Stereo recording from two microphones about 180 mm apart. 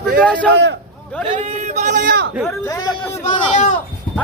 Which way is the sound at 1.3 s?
35° right (ahead or behind).